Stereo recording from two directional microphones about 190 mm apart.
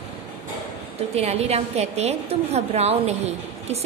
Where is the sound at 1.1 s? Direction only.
35° right (ahead or behind).